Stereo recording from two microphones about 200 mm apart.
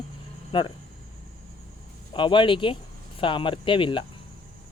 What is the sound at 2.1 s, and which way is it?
Speech, 25° left (ahead or behind).